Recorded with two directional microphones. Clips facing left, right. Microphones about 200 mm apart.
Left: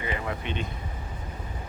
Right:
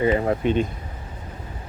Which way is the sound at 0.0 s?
40° right (ahead or behind).